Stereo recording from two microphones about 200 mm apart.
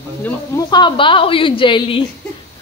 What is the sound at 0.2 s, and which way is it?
A woman's voice, 20° left (ahead or behind).